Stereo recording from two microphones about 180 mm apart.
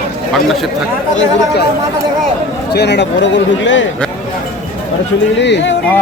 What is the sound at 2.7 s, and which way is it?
Speech, 70° left (ahead or behind).